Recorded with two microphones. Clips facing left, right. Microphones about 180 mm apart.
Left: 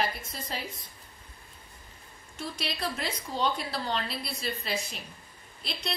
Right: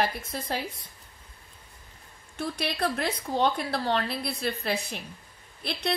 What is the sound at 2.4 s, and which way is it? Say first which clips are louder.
Speech: right 6 dB; 60° right (ahead or behind).